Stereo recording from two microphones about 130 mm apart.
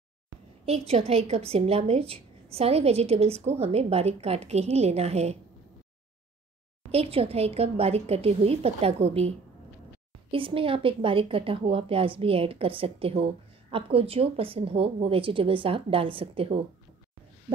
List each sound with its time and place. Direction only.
0.7 s a woman's voice: 55° right (ahead or behind)
6.9 s a woman's voice: 50° right (ahead or behind)
10.3 s a woman's voice: 45° right (ahead or behind)